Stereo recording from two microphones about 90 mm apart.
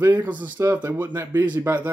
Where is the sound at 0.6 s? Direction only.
30° right (ahead or behind).